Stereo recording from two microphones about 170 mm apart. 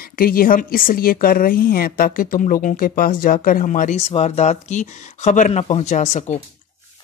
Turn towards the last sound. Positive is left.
turn(degrees=45)  # may be behind; listen again after turning